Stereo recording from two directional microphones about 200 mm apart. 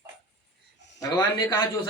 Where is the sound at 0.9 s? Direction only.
10° left (ahead or behind).